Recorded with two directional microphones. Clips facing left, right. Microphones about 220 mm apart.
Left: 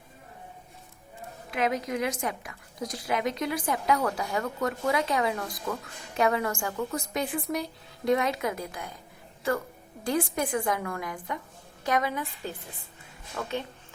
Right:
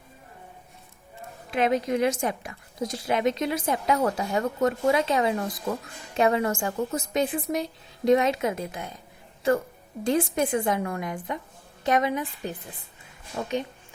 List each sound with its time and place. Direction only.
1.5 s a woman's voice: 30° right (ahead or behind)
10.0 s a woman's voice: 20° right (ahead or behind)